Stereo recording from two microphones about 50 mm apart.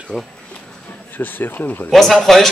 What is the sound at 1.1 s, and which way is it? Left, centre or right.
Speech, left.